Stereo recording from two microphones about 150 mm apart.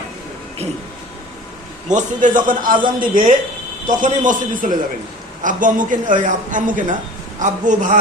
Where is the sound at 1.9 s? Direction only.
60° right (ahead or behind).